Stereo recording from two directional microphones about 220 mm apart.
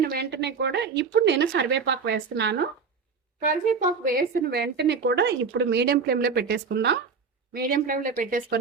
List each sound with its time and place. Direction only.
0.0 s a woman's voice: 45° right (ahead or behind)
3.4 s a woman's voice: 40° right (ahead or behind)